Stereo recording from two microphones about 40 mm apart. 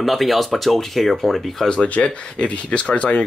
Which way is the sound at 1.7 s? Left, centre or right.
Left.